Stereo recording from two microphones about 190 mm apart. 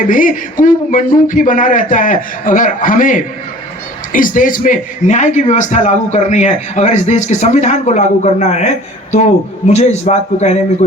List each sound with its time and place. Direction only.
0.0 s a man's voice: 45° left (ahead or behind)